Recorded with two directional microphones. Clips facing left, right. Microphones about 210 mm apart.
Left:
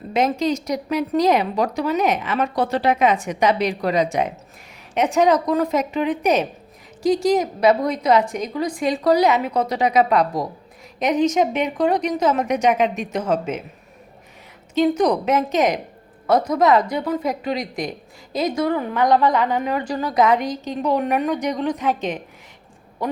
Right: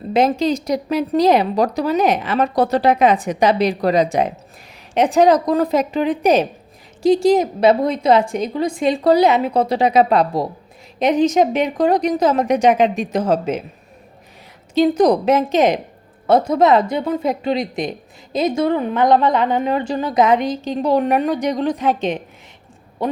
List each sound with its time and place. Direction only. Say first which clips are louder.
0.1 s a woman's voice: right 4 dB; 30° right (ahead or behind)
14.8 s a woman's voice: right 4 dB; 35° right (ahead or behind)